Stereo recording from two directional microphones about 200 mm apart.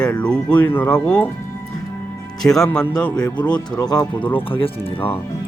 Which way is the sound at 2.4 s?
5° left (ahead or behind).